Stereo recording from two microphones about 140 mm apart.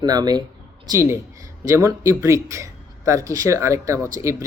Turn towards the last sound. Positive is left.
turn(degrees=-20)  # may be behind; listen again after turning